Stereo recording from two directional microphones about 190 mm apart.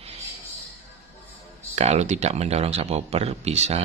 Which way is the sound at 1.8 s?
35° right (ahead or behind).